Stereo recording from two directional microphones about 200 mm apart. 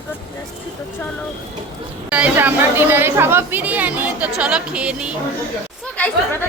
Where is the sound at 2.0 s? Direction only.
5° right (ahead or behind).